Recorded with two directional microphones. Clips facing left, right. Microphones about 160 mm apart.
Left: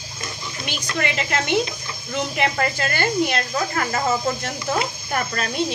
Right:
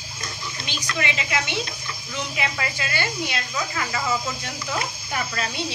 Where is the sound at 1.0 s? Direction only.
50° left (ahead or behind).